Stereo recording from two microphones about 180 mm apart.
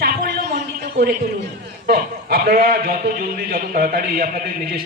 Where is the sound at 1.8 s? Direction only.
55° right (ahead or behind).